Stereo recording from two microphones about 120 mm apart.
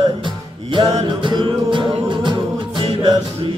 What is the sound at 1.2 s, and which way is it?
Music, 40° right (ahead or behind).